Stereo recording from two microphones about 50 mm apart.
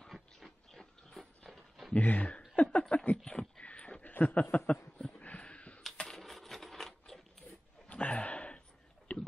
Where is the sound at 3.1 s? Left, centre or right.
Centre.